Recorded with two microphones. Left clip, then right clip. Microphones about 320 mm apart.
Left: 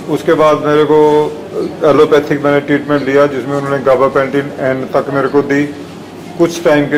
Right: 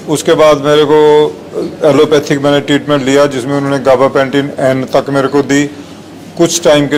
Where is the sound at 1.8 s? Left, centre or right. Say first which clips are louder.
Even; right.